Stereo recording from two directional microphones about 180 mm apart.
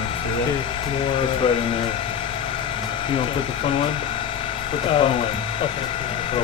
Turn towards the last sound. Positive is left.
turn(degrees=30)  # may be behind; listen again after turning